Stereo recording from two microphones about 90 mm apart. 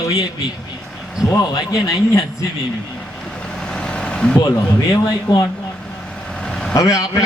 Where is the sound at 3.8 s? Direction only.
10° left (ahead or behind).